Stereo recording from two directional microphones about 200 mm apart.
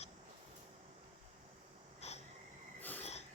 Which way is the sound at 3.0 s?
30° left (ahead or behind).